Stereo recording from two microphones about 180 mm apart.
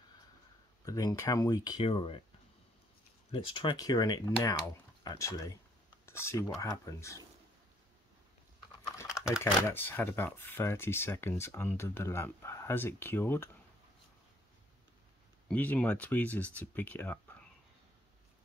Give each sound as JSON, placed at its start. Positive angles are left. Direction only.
{"t": 0.8, "sound": "speech", "side_deg": 20}
{"t": 3.3, "sound": "speech", "side_deg": 30}
{"t": 9.4, "sound": "speech", "side_deg": 15}
{"t": 15.4, "sound": "speech", "side_deg": 10}